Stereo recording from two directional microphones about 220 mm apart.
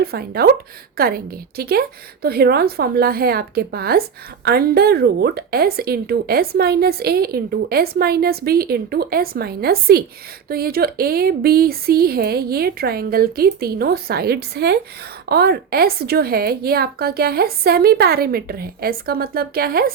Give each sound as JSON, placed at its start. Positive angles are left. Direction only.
{"t": 0.0, "sound": "speech", "side_deg": -45}